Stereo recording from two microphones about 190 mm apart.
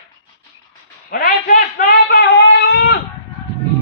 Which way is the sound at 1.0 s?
50° left (ahead or behind).